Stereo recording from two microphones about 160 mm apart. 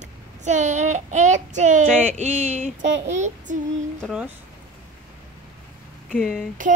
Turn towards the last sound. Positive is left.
turn(degrees=5)  # may be behind; listen again after turning